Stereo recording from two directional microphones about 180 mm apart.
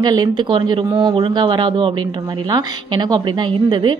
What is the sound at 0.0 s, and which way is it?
A woman's voice, 25° right (ahead or behind).